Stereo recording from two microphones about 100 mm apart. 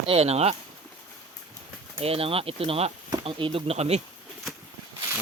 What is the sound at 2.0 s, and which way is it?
Speech, 75° right (ahead or behind).